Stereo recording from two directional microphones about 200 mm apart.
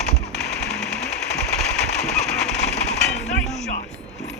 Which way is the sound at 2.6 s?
35° left (ahead or behind).